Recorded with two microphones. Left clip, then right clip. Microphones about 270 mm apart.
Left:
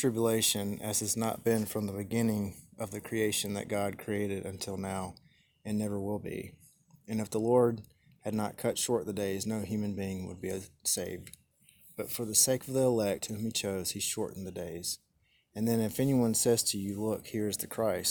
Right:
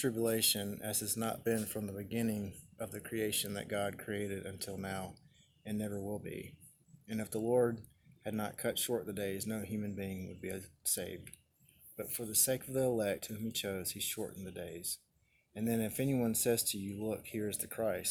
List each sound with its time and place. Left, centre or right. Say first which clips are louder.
0.0 s speech: left 4 dB; left